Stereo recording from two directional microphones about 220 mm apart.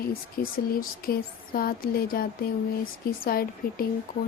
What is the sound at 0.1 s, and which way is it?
Speech, 40° left (ahead or behind).